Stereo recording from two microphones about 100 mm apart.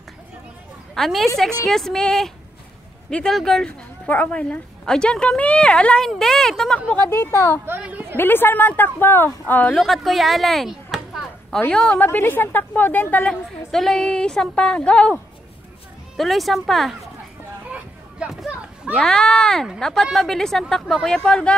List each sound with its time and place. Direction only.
0.9 s speech: centre (ahead or behind)
6.9 s speech: 25° left (ahead or behind)
7.8 s a sound: 15° right (ahead or behind)
8.2 s speech: 20° left (ahead or behind)
9.8 s speech: centre (ahead or behind)
11.7 s speech: 10° left (ahead or behind)
16.2 s speech: centre (ahead or behind)
18.2 s a sound: 10° right (ahead or behind)
18.9 s speech: 5° left (ahead or behind)